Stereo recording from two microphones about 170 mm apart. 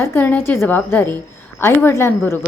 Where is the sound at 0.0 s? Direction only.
10° left (ahead or behind).